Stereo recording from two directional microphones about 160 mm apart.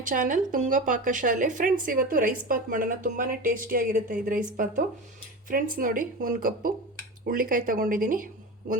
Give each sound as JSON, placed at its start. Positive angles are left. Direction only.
{"t": 0.0, "sound": "a woman's voice", "side_deg": -55}